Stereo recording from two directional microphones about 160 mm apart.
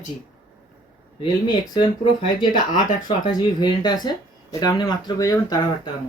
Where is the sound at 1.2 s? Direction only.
25° left (ahead or behind).